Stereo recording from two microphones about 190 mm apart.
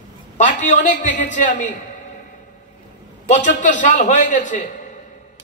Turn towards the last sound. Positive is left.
turn(degrees=40)  # may be behind; listen again after turning